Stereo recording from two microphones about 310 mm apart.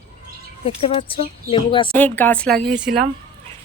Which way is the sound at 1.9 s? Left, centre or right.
Centre.